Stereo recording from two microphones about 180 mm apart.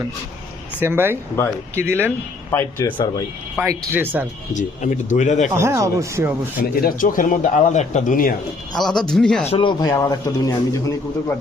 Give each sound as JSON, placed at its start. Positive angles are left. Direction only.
{"t": 0.8, "sound": "speech", "side_deg": -10}
{"t": 2.0, "sound": "speech", "side_deg": 15}
{"t": 3.7, "sound": "speech", "side_deg": -10}
{"t": 4.5, "sound": "speech", "side_deg": 45}
{"t": 5.5, "sound": "speech", "side_deg": -15}
{"t": 6.6, "sound": "speech", "side_deg": 50}
{"t": 8.7, "sound": "speech", "side_deg": 0}
{"t": 9.5, "sound": "speech", "side_deg": 25}